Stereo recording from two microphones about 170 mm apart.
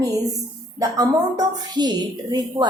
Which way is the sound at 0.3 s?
20° right (ahead or behind).